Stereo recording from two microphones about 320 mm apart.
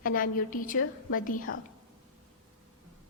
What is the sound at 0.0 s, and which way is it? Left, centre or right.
A woman's voice, left.